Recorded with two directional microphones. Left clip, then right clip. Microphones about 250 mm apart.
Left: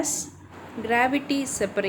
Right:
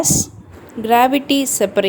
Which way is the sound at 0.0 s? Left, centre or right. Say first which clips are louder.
Right 11 dB; right.